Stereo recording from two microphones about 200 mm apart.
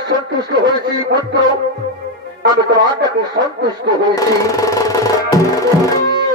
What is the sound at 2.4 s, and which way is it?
Speech, 20° right (ahead or behind).